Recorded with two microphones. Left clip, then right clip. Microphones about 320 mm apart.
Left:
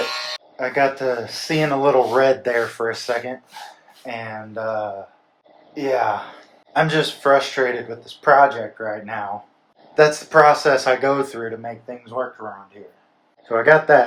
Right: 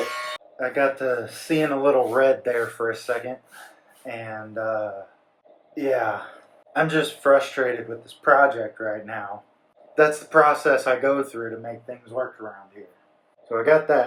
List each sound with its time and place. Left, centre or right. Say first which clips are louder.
0.5 s speech: left 3 dB; left
13.5 s speech: left 5 dB; left